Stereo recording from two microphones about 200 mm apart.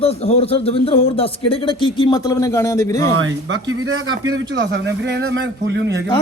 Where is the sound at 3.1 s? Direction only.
80° right.